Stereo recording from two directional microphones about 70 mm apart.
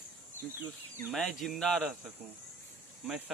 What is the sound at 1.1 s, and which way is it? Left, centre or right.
Speech, centre.